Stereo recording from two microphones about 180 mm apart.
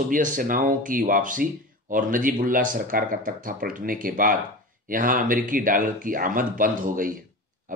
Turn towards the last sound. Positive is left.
turn(degrees=-50)  # may be behind; listen again after turning